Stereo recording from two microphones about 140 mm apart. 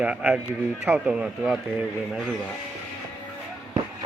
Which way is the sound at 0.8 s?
15° right (ahead or behind).